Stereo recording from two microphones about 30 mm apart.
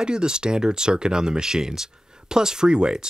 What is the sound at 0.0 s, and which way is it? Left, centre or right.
Speech, right.